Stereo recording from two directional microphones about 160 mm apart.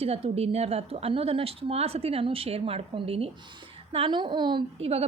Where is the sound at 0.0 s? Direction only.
40° right (ahead or behind).